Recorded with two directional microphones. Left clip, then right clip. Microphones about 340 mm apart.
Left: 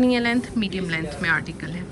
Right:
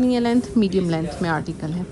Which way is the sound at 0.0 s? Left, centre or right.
Centre.